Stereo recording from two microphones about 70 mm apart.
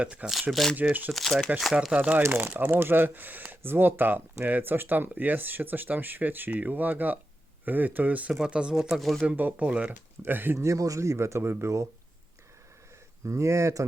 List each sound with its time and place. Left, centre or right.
0.0 s speech: centre
0.5 s speech: centre
0.8 s speech: right
1.1 s speech: centre
1.9 s speech: centre
2.2 s speech: right; by 9.1 s centre
9.2 s speech: right
10.2 s speech: right
10.6 s speech: right
13.2 s speech: right